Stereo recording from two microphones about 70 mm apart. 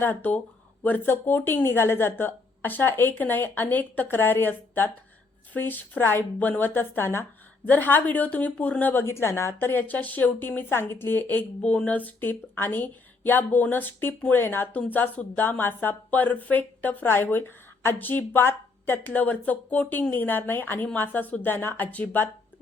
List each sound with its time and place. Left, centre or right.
0.0 s a woman's voice: left